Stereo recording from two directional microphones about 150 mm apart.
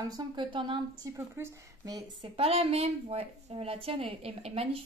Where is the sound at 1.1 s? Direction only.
20° right (ahead or behind).